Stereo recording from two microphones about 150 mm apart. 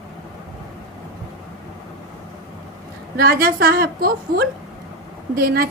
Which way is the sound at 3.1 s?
90° right.